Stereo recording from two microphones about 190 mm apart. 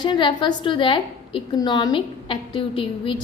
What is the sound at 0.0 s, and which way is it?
A woman's voice, 25° left (ahead or behind).